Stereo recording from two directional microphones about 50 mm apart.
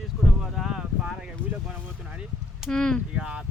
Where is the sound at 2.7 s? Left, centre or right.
Centre.